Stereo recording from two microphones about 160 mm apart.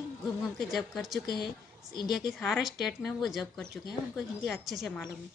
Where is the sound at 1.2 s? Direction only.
25° left (ahead or behind).